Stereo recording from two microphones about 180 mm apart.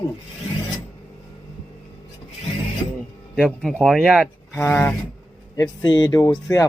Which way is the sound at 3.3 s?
5° left (ahead or behind).